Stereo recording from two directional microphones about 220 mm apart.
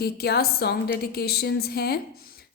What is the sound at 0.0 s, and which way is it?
A woman's voice, 45° left (ahead or behind).